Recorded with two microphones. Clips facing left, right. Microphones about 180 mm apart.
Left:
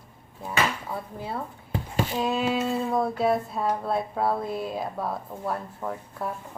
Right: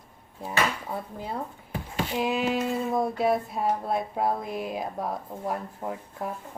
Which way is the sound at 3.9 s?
15° right (ahead or behind).